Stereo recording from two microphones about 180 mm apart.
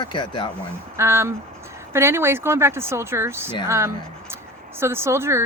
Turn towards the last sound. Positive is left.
turn(degrees=-15)  # may be behind; listen again after turning